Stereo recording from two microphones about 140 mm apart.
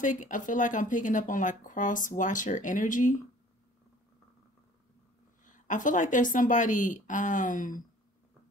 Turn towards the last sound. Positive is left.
turn(degrees=70)  # may be behind; listen again after turning